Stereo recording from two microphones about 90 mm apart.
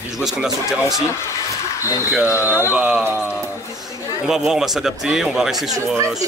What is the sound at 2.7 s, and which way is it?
Speech, 10° right (ahead or behind).